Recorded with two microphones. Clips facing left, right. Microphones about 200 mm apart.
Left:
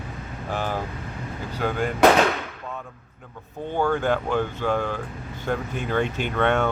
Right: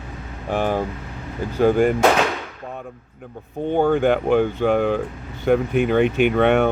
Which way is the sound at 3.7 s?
55° right (ahead or behind).